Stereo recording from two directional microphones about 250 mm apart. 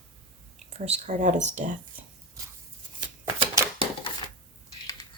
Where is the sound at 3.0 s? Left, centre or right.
Centre.